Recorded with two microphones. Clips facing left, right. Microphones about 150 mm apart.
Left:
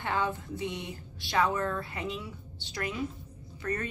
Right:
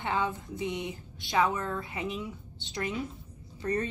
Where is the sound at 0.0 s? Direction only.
20° right (ahead or behind).